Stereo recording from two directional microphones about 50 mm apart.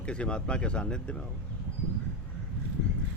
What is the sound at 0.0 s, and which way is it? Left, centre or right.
Speech, left.